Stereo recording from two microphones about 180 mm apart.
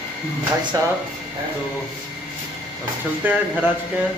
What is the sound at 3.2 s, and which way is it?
Speech, 10° right (ahead or behind).